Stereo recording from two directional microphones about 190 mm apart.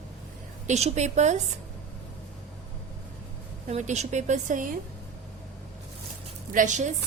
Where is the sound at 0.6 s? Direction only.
35° right (ahead or behind).